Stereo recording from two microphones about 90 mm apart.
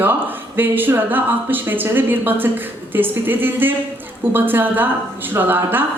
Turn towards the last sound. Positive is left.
turn(degrees=-20)  # may be behind; listen again after turning